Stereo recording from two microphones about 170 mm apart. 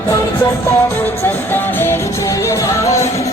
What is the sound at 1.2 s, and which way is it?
Music, 10° left (ahead or behind).